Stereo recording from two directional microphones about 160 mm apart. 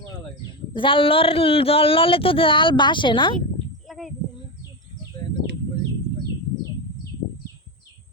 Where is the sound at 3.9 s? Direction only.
Centre (ahead or behind).